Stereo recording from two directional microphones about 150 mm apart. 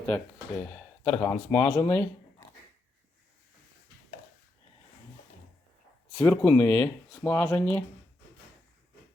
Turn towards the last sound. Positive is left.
turn(degrees=15)  # may be behind; listen again after turning